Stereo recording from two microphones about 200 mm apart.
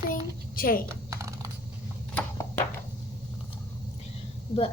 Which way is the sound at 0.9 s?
15° right (ahead or behind).